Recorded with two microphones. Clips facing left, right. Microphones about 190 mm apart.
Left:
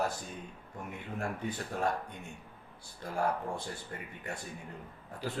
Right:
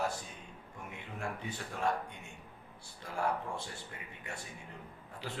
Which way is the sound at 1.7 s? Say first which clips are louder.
Left 2 dB; 40° left (ahead or behind).